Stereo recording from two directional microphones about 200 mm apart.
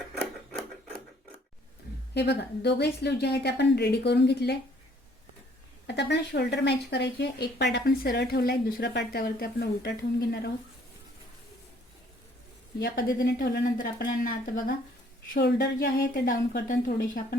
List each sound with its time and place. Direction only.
2.1 s a woman's voice: 55° left (ahead or behind)
5.9 s a woman's voice: 55° left (ahead or behind)
12.8 s a woman's voice: 50° left (ahead or behind)
15.3 s a woman's voice: 55° left (ahead or behind)